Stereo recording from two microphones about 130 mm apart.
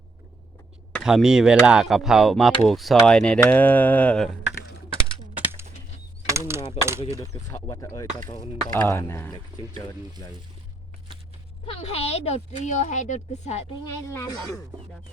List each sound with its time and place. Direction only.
1.0 s speech: 5° right (ahead or behind)
3.4 s a sound: 15° left (ahead or behind)
5.4 s a sound: 15° right (ahead or behind)
6.7 s speech: 20° right (ahead or behind)
7.2 s speech: 25° left (ahead or behind)
8.7 s a sound: 15° left (ahead or behind)
9.8 s speech: 30° left (ahead or behind)
11.6 s speech: 50° left (ahead or behind)
14.1 s speech: 25° left (ahead or behind)